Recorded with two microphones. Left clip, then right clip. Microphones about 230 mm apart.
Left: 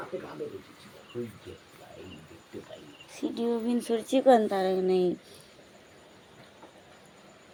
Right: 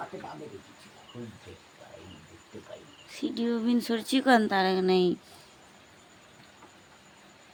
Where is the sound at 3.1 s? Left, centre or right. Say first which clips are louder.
Left 1 dB; centre.